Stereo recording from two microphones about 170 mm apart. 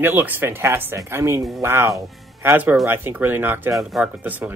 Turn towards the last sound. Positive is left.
turn(degrees=-10)  # may be behind; listen again after turning